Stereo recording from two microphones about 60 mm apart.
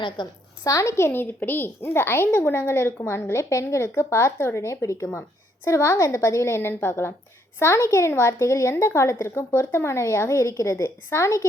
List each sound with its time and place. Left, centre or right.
0.6 s a woman's voice: left
0.9 s a child's voice: left
5.6 s a child's voice: left